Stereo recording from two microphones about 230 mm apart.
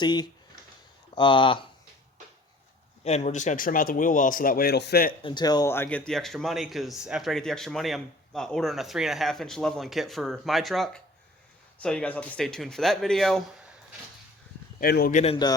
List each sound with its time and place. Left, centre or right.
0.0 s speech: centre
3.0 s speech: left
5.2 s speech: centre
14.8 s speech: left
15.2 s speech: left